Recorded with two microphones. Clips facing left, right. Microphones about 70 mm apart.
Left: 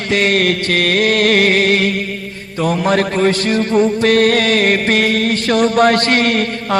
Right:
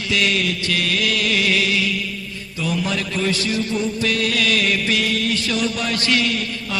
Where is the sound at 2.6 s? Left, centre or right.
Left.